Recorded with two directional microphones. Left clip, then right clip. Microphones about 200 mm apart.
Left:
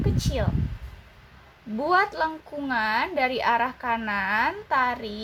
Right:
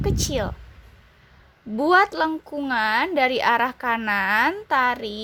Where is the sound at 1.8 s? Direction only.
60° right (ahead or behind).